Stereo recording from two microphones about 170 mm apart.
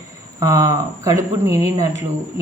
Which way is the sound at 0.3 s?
20° right (ahead or behind).